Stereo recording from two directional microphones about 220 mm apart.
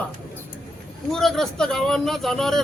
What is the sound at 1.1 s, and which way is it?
Speech, centre (ahead or behind).